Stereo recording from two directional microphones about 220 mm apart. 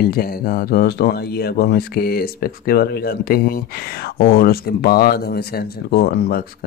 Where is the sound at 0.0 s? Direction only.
45° left (ahead or behind).